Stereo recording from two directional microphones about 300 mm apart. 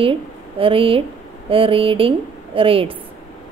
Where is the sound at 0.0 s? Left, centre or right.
Centre.